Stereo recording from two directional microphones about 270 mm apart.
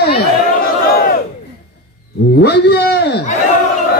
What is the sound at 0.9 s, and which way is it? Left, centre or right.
Battle cry, left.